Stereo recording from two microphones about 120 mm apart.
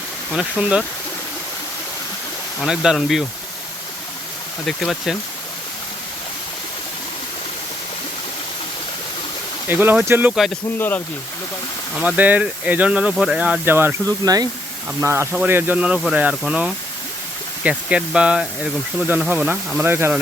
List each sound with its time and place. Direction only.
0.3 s speech: 10° right (ahead or behind)
2.6 s speech: 5° right (ahead or behind)
4.6 s speech: centre (ahead or behind)
9.6 s speech: 15° right (ahead or behind)
10.3 s speech: centre (ahead or behind)
10.8 s speech: 15° left (ahead or behind)
11.9 s speech: 10° right (ahead or behind)
14.3 s speech: 35° right (ahead or behind)
15.0 s speech: 20° right (ahead or behind)